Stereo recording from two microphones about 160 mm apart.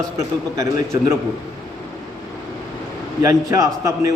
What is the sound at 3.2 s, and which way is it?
Speech, 20° right (ahead or behind).